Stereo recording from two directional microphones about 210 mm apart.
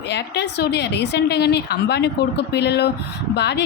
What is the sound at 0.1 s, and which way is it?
Speech, 55° left (ahead or behind).